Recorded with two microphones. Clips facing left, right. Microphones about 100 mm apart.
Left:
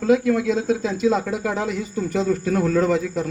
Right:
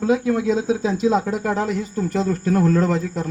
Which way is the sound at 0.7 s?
30° right (ahead or behind).